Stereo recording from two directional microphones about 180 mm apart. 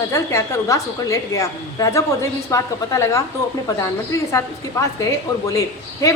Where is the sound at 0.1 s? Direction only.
15° left (ahead or behind).